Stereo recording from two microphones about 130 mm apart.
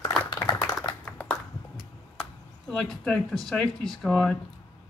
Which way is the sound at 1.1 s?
10° left (ahead or behind).